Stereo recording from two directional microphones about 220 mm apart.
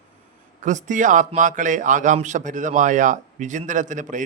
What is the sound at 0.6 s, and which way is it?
A man's voice, 35° right (ahead or behind).